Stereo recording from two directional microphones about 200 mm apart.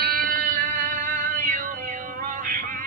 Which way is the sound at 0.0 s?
50° right (ahead or behind).